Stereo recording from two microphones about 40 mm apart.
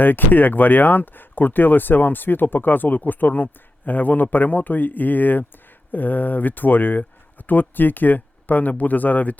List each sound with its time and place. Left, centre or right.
0.0 s speech: left